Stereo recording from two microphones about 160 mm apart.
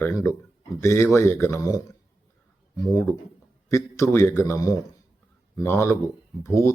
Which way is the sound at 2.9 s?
20° left (ahead or behind).